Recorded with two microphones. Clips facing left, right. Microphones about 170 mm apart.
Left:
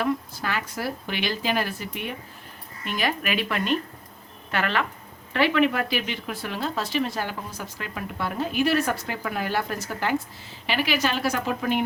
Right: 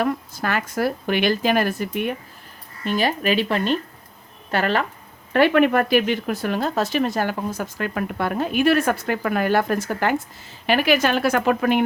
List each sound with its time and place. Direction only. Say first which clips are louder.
0.0 s speech: right 3 dB; 50° right (ahead or behind)
2.8 s speech: right 6 dB; 30° right (ahead or behind)
5.3 s speech: right 5 dB; 50° right (ahead or behind)